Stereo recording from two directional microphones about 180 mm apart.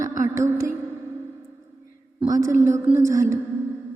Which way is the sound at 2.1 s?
20° right (ahead or behind).